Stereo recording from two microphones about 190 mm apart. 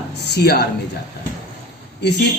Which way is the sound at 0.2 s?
60° left (ahead or behind).